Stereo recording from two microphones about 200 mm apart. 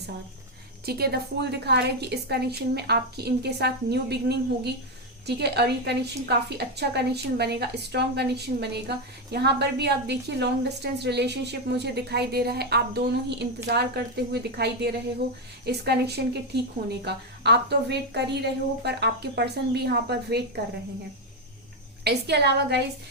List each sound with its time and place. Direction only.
0.9 s a woman's voice: 50° right (ahead or behind)
22.0 s a woman's voice: 55° right (ahead or behind)